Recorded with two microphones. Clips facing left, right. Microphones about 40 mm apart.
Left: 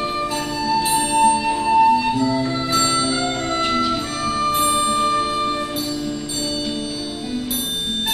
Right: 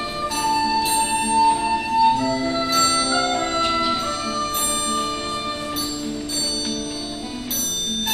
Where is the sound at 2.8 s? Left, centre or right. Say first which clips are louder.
Even; left.